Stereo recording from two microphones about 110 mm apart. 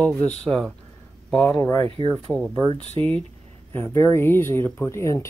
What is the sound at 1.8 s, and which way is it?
Speech, 55° right (ahead or behind).